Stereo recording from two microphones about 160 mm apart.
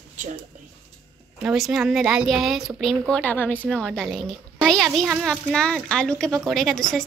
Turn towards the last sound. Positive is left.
turn(degrees=0)  # may be behind; listen again after turning